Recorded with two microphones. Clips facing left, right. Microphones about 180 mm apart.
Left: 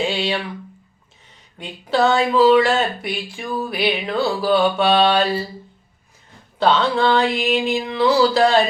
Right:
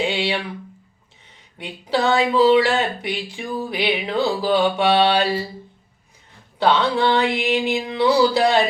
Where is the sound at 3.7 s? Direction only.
20° right (ahead or behind).